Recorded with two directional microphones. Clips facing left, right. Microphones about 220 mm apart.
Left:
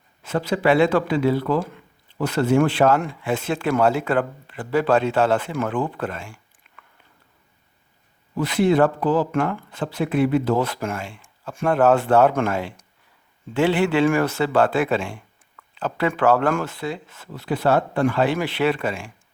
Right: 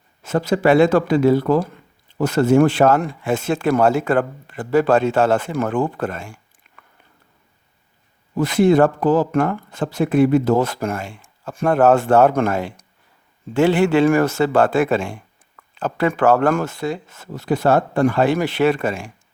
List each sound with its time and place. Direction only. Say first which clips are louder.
0.2 s speech: right 4 dB; 45° right (ahead or behind)
8.4 s speech: right 4 dB; 45° right (ahead or behind)